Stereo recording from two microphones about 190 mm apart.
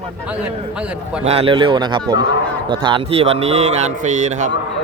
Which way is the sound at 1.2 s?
30° right (ahead or behind).